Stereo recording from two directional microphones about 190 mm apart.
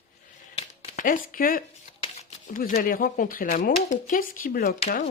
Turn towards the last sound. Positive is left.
turn(degrees=40)  # may be behind; listen again after turning